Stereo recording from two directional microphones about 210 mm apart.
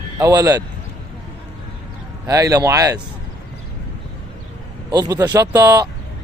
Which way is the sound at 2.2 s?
15° right (ahead or behind).